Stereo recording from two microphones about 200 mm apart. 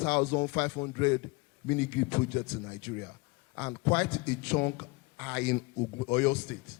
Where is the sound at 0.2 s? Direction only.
25° left (ahead or behind).